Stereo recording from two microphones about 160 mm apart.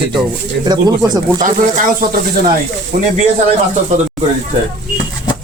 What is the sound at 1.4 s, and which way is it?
Speech, 55° right (ahead or behind).